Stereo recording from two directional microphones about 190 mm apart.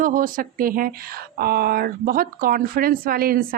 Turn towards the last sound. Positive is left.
turn(degrees=-50)  # may be behind; listen again after turning